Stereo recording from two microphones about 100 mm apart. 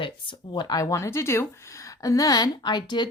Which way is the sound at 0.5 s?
40° left (ahead or behind).